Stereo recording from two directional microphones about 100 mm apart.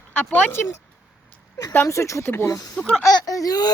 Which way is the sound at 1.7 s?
25° left (ahead or behind).